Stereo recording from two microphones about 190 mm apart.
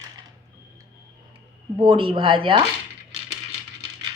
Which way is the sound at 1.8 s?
25° right (ahead or behind).